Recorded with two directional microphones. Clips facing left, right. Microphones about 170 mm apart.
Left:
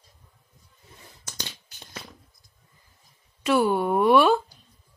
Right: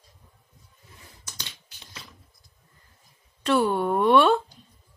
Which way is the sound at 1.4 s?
45° left (ahead or behind).